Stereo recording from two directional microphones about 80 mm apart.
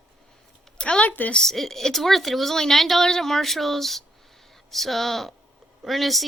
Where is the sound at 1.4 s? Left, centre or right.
Centre.